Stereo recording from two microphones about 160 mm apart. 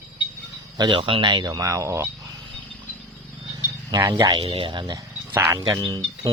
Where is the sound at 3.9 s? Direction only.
25° right (ahead or behind).